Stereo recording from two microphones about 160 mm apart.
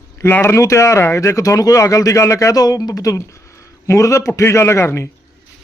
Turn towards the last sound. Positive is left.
turn(degrees=15)  # may be behind; listen again after turning